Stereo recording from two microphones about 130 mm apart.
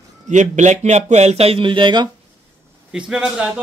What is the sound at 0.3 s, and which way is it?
Speech, 70° right (ahead or behind).